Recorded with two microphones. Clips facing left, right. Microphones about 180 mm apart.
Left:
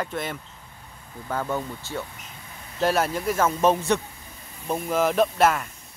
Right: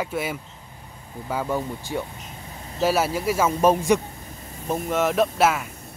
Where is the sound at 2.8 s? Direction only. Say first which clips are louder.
Right 1 dB; 5° right (ahead or behind).